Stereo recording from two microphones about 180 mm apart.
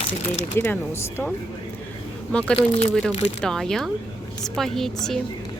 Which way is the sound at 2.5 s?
35° left (ahead or behind).